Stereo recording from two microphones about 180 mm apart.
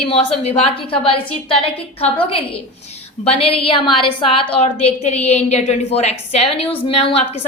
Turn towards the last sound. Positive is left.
turn(degrees=35)  # may be behind; listen again after turning